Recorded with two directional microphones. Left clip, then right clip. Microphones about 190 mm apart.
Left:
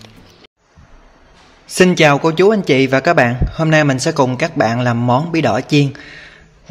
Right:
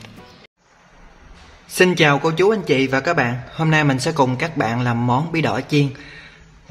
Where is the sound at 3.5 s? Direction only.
20° left (ahead or behind).